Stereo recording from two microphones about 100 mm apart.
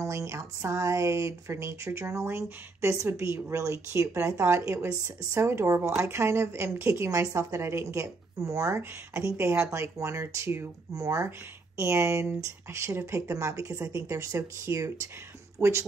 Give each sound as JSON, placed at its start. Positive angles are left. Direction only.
{"t": 0.0, "sound": "a woman's voice", "side_deg": -30}